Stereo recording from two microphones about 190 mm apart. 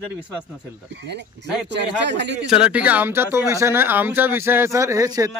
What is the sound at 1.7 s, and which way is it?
Speech, 65° right (ahead or behind).